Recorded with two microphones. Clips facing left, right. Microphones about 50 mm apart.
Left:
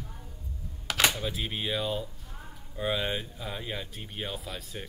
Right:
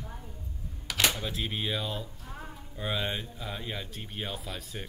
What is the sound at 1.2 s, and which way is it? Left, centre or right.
Speech, centre.